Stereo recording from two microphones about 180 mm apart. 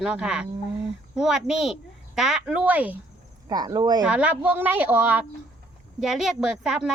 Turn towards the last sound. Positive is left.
turn(degrees=-5)  # may be behind; listen again after turning